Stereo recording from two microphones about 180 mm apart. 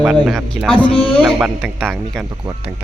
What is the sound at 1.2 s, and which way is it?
Speech, 5° right (ahead or behind).